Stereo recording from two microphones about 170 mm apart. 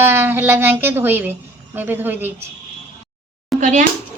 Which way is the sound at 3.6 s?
45° right (ahead or behind).